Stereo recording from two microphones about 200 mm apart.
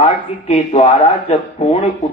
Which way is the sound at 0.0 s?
35° left (ahead or behind).